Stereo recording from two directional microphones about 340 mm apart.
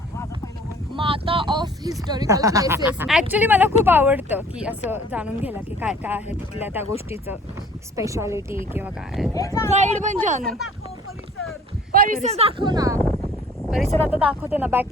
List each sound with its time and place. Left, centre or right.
0.9 s speech: centre
9.3 s speech: centre
9.6 s speech: centre
11.9 s speech: right
13.7 s speech: centre